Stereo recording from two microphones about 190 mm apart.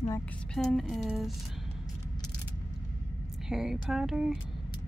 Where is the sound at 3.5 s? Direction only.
Centre (ahead or behind).